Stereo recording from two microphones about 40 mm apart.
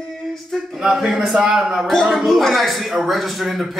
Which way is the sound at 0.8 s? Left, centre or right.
Centre.